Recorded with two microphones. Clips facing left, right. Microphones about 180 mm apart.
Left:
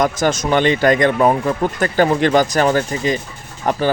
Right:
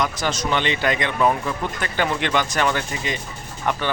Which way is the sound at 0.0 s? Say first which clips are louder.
Left 7 dB; 50° left (ahead or behind).